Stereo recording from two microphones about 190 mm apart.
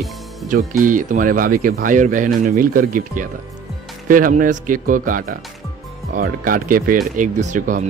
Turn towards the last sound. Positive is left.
turn(degrees=-40)  # may be behind; listen again after turning